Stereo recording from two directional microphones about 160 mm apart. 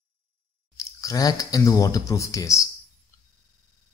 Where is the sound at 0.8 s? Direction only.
20° left (ahead or behind).